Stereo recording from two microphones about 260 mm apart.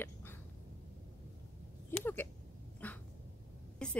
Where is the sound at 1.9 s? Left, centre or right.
Centre.